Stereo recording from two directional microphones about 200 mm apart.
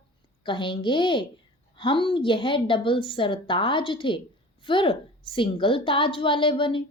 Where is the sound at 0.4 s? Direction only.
25° left (ahead or behind).